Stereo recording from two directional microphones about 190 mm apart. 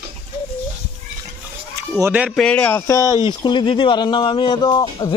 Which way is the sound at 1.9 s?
5° right (ahead or behind).